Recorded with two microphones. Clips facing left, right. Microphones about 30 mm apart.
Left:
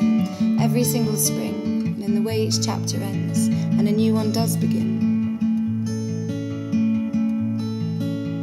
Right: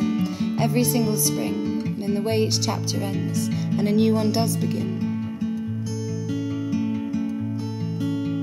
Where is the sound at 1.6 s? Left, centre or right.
Centre.